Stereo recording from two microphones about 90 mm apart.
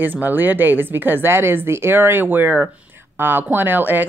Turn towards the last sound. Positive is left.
turn(degrees=-20)  # may be behind; listen again after turning